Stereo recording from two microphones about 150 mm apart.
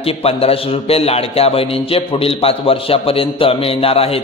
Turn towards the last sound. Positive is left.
turn(degrees=40)  # may be behind; listen again after turning